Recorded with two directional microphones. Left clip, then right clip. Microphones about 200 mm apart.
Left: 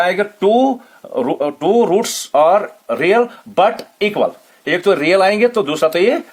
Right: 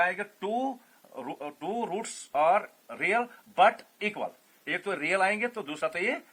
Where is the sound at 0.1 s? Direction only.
55° left (ahead or behind).